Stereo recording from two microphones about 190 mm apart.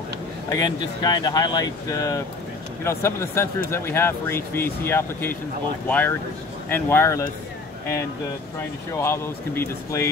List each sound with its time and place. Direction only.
0.5 s speech: 20° left (ahead or behind)
9.0 s speech: 15° left (ahead or behind)